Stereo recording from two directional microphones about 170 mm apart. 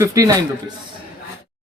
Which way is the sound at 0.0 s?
20° right (ahead or behind).